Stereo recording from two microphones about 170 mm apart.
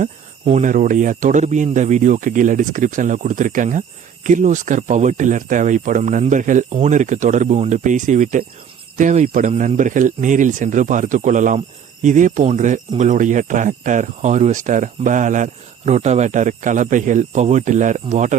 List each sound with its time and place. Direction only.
0.0 s speech: 40° right (ahead or behind)